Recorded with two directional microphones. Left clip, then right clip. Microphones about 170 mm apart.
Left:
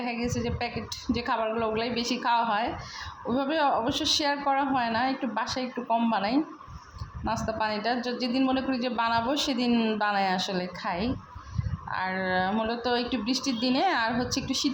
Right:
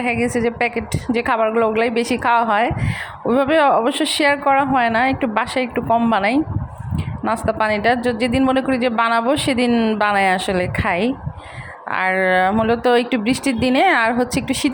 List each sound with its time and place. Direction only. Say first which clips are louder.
0.0 s a woman's voice: right 12 dB; 35° right (ahead or behind)
9.7 s speech: right 9 dB; 20° right (ahead or behind)
10.0 s a woman's voice: right 12 dB; 35° right (ahead or behind)